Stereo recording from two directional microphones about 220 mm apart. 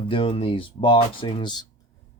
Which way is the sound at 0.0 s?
25° left (ahead or behind).